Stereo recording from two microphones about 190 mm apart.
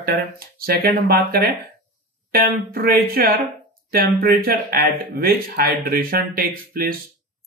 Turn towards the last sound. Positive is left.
turn(degrees=-50)  # may be behind; listen again after turning